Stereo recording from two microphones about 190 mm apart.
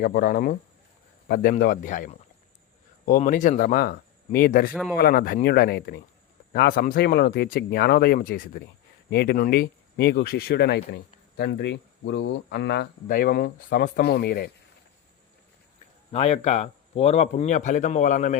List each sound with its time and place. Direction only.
0.0 s speech: 50° left (ahead or behind)
16.1 s a man's voice: 35° left (ahead or behind)